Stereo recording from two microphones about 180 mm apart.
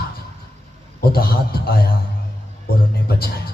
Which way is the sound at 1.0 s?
60° left (ahead or behind).